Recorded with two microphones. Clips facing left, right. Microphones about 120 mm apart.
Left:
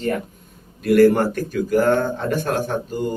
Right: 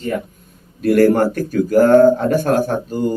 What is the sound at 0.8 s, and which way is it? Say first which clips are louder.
A man's voice: right 1 dB; 45° right (ahead or behind).